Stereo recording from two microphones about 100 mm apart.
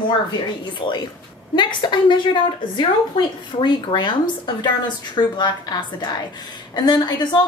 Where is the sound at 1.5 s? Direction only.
50° left (ahead or behind).